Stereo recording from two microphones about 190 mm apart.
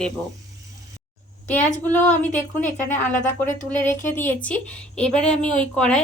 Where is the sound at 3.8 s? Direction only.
40° left (ahead or behind).